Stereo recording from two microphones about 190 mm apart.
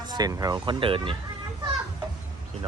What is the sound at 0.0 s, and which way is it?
Speech, 20° right (ahead or behind).